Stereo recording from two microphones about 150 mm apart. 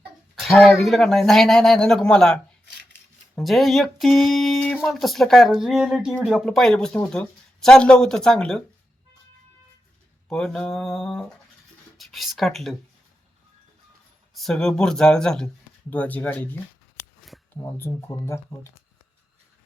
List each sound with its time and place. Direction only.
0.3 s speech: centre (ahead or behind)
10.2 s speech: 5° left (ahead or behind)
14.3 s speech: 5° left (ahead or behind)
17.2 s a sound: centre (ahead or behind)
17.5 s speech: 15° left (ahead or behind)